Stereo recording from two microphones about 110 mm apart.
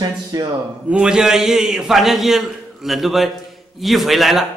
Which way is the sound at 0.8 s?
10° right (ahead or behind).